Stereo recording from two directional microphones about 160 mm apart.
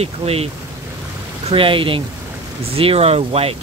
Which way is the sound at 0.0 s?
40° right (ahead or behind).